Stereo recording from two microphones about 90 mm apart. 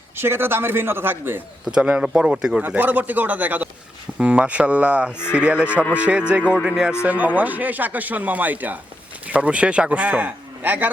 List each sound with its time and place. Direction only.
0.2 s speech: 25° right (ahead or behind)
1.6 s a man's voice: 10° right (ahead or behind)
2.6 s a man's voice: 20° right (ahead or behind)
7.0 s a man's voice: 20° right (ahead or behind)